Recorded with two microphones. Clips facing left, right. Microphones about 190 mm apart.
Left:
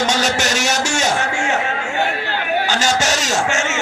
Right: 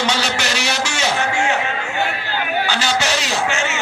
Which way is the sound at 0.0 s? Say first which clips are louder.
Left 2 dB; 45° left (ahead or behind).